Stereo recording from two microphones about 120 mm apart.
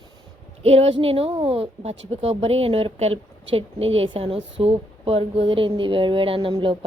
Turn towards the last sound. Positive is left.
turn(degrees=-45)  # may be behind; listen again after turning